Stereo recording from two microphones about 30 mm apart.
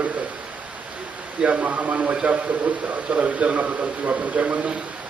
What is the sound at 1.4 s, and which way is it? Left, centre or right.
A man's voice, right.